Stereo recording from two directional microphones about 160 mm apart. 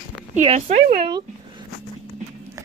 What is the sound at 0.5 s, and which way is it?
Speech, 45° right (ahead or behind).